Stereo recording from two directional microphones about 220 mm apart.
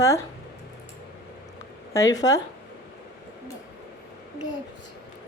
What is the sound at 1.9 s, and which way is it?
Speech, 15° left (ahead or behind).